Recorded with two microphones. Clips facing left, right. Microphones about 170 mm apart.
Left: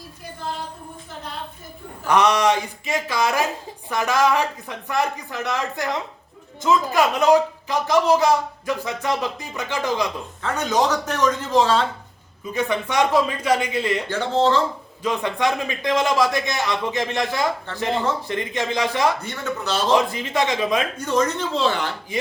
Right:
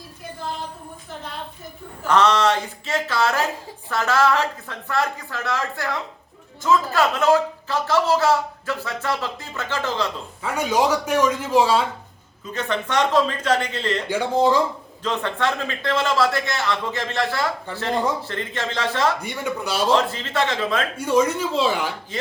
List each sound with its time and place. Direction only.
2.0 s speech: 15° left (ahead or behind)
10.4 s speech: 10° right (ahead or behind)
12.5 s speech: 10° left (ahead or behind)
14.1 s speech: 10° right (ahead or behind)
15.0 s speech: 10° left (ahead or behind)
19.2 s speech: 10° right (ahead or behind)
19.9 s speech: 10° left (ahead or behind)
20.9 s speech: 10° right (ahead or behind)